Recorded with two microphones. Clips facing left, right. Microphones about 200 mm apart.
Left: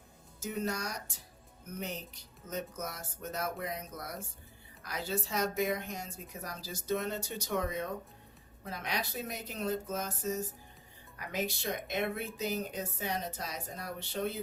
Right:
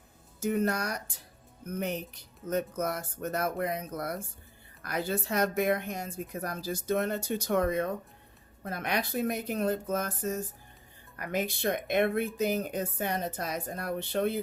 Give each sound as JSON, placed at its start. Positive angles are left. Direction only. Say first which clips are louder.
{"t": 0.3, "sound": "speech", "louder": "right 7 dB", "side_deg": -55}
{"t": 2.5, "sound": "speech", "louder": "right 9 dB", "side_deg": -60}